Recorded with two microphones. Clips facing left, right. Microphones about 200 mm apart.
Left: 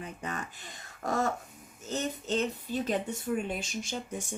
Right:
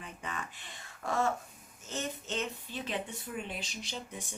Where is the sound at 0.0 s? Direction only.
40° left (ahead or behind).